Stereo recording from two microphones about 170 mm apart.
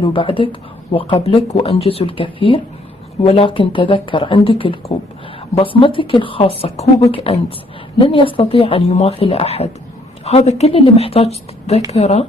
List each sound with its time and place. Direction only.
0.0 s speech: 30° left (ahead or behind)